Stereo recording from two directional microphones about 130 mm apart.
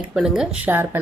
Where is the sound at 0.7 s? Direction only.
15° right (ahead or behind).